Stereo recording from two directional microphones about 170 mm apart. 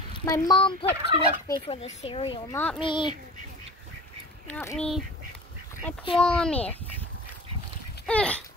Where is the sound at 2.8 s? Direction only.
30° left (ahead or behind).